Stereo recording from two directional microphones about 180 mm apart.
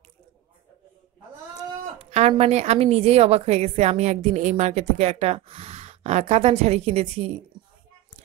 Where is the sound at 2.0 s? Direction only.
35° right (ahead or behind).